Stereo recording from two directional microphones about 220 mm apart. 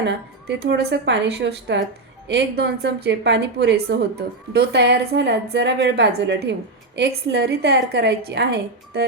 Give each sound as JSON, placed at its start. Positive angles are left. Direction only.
{"t": 0.0, "sound": "a woman's voice", "side_deg": -50}